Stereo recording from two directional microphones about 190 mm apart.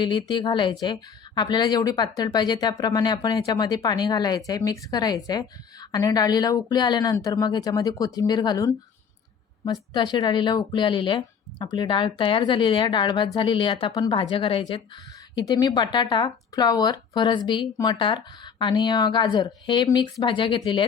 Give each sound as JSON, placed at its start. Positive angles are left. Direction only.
{"t": 0.0, "sound": "speech", "side_deg": 25}
{"t": 9.9, "sound": "speech", "side_deg": 25}